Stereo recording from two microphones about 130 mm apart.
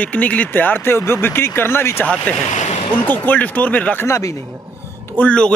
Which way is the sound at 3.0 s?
15° left (ahead or behind).